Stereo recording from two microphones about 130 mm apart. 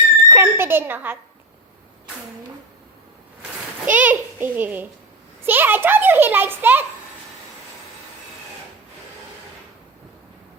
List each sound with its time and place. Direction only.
0.2 s speech: 20° right (ahead or behind)
3.8 s a child's voice: 15° right (ahead or behind)